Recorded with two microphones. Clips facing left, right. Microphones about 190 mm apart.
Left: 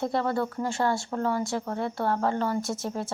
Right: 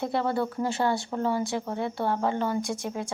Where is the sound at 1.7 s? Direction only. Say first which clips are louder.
Left 1 dB; 20° right (ahead or behind).